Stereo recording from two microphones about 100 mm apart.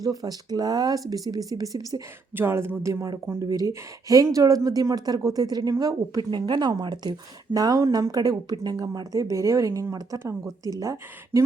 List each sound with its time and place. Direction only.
0.0 s speech: 35° right (ahead or behind)
2.3 s speech: 25° right (ahead or behind); by 8.9 s 45° right (ahead or behind)
9.0 s speech: 30° right (ahead or behind)